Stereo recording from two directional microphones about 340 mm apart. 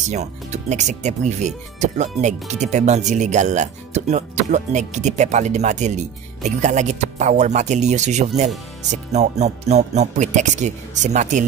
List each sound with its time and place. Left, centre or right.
0.1 s speech: centre